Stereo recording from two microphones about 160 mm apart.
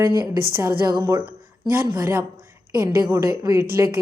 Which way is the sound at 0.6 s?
20° right (ahead or behind).